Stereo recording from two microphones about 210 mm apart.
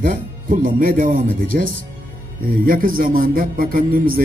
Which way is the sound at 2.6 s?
40° right (ahead or behind).